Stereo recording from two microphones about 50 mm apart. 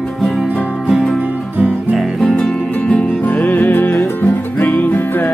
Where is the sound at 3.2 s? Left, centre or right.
Left.